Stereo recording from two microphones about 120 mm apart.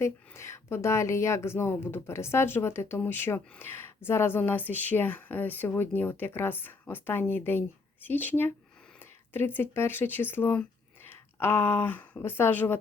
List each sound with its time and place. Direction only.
0.0 s speech: 25° left (ahead or behind)